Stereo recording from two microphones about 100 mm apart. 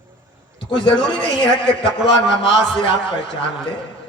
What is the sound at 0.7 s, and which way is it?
Speech, 60° left (ahead or behind).